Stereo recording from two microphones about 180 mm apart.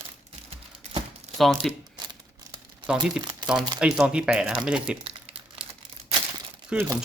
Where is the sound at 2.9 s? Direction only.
5° right (ahead or behind).